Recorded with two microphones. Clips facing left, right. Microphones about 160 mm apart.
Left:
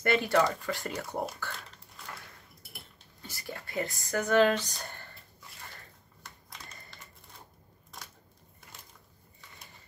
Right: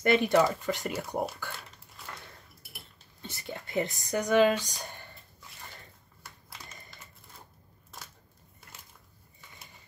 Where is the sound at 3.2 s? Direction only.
25° right (ahead or behind).